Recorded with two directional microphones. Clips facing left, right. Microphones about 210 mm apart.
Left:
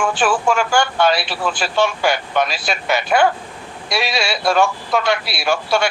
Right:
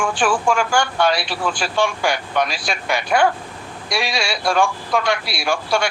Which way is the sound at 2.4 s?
25° left (ahead or behind).